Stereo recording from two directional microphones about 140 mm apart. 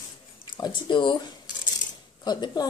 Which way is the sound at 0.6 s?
35° left (ahead or behind).